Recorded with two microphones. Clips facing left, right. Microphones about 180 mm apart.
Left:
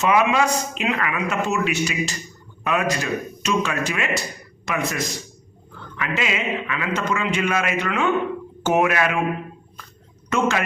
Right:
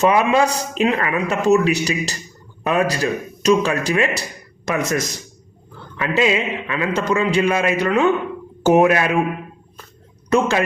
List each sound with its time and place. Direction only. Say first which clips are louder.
0.0 s speech: right 3 dB; 35° right (ahead or behind)
10.2 s speech: right 4 dB; 35° right (ahead or behind)